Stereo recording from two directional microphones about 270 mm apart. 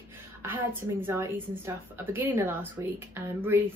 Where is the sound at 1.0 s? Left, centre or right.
Centre.